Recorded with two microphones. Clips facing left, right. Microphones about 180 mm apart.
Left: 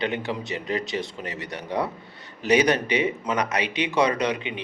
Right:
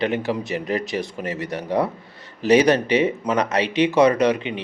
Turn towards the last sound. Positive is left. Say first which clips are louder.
# right 6 dB
turn(degrees=15)  # may be behind; listen again after turning